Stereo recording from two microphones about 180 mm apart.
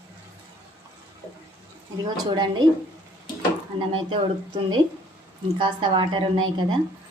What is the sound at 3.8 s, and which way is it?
Speech, 30° right (ahead or behind).